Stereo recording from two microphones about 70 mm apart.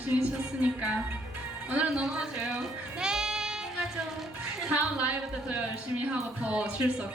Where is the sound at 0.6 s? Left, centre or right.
Right.